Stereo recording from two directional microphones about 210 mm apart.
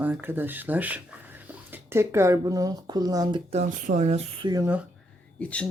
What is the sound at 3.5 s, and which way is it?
Speech, 30° right (ahead or behind).